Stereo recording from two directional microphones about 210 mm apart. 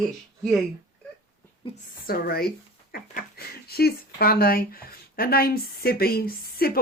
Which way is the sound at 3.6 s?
50° left (ahead or behind).